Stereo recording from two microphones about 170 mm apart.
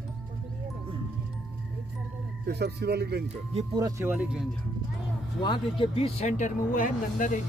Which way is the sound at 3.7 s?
20° right (ahead or behind).